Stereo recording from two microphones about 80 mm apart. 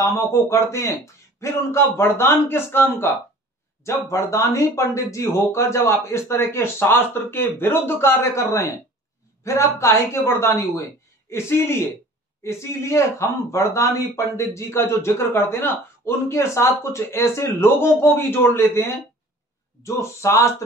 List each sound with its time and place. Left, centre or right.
0.0 s speech: left
3.8 s speech: left